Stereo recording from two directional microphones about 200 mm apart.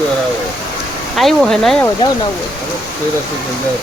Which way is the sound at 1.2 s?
Centre (ahead or behind).